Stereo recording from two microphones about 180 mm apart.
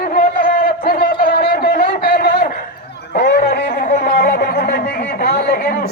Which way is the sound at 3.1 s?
65° left (ahead or behind).